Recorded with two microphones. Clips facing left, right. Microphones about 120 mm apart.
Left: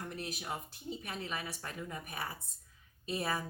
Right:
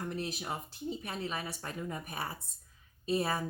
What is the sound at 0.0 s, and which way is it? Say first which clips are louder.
Speech: right 4 dB; 30° right (ahead or behind).